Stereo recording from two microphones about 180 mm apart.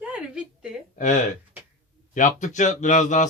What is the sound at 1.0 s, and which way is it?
Speech, 45° left (ahead or behind).